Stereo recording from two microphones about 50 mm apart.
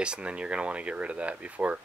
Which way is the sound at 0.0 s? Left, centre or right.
Right.